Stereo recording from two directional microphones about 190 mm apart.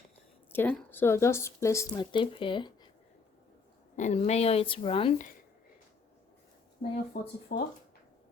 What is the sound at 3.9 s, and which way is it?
A woman's voice, 40° left (ahead or behind).